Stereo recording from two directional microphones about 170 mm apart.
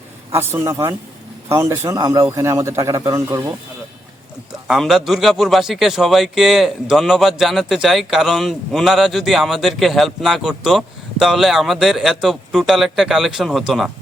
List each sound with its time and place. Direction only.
0.3 s speech: 15° right (ahead or behind)
4.7 s a man's voice: centre (ahead or behind)